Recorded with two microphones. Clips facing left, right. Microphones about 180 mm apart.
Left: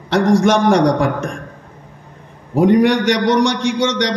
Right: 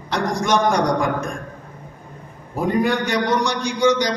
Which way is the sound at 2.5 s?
75° left (ahead or behind).